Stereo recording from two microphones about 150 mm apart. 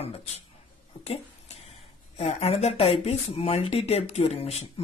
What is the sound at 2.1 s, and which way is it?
Speech, 45° left (ahead or behind).